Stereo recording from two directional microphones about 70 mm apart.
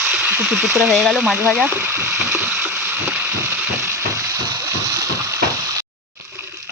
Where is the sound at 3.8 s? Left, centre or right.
Right.